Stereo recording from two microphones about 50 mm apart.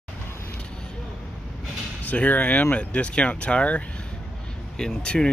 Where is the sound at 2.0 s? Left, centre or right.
Left.